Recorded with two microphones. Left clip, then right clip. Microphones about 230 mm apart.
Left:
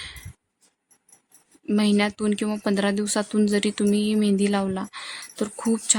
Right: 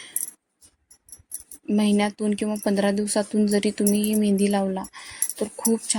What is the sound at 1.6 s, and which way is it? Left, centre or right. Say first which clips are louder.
Speech: even; centre.